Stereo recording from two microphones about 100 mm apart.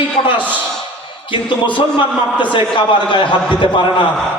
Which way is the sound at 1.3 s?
55° left (ahead or behind).